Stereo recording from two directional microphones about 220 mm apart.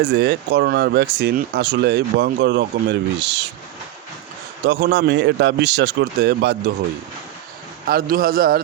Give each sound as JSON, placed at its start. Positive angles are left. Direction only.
{"t": 0.0, "sound": "speech", "side_deg": -50}
{"t": 4.6, "sound": "speech", "side_deg": -50}
{"t": 7.9, "sound": "a man's voice", "side_deg": -40}